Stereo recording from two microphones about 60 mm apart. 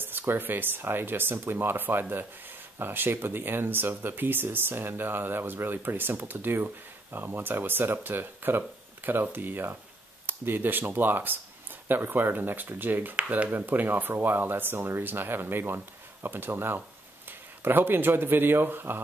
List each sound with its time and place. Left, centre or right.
0.0 s speech: right